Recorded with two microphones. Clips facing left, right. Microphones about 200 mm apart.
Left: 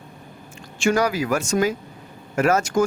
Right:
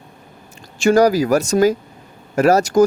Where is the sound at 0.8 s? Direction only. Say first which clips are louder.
Right 7 dB; 40° right (ahead or behind).